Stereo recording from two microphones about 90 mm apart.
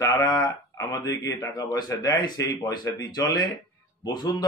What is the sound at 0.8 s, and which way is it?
A man's voice, 40° left (ahead or behind).